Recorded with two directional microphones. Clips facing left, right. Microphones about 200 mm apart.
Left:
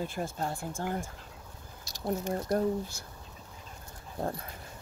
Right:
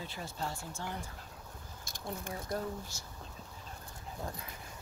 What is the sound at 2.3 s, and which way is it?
Speech, 50° left (ahead or behind).